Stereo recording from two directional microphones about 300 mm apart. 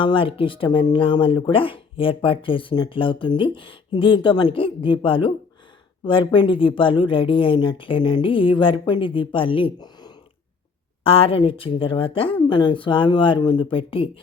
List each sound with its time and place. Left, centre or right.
0.0 s speech: centre